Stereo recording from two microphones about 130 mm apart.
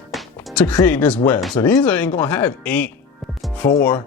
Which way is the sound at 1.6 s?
25° left (ahead or behind).